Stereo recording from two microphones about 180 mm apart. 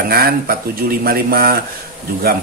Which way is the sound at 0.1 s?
55° right (ahead or behind).